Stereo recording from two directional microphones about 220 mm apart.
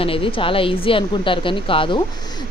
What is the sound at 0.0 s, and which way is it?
Speech, 25° left (ahead or behind).